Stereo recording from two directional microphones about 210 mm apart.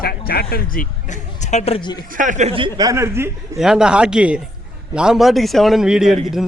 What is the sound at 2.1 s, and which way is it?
A man's voice, 35° right (ahead or behind).